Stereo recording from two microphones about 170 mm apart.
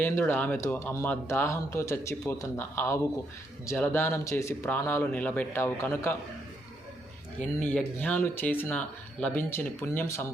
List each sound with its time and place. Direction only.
0.0 s speech: 10° left (ahead or behind)
7.3 s speech: 10° left (ahead or behind)